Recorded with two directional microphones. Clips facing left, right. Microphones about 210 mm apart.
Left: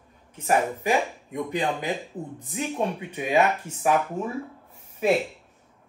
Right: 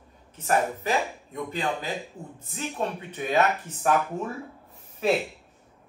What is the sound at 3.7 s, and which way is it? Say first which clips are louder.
Speech: left 3 dB; 30° left (ahead or behind).